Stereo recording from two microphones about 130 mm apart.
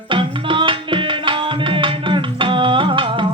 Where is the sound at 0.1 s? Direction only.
40° right (ahead or behind).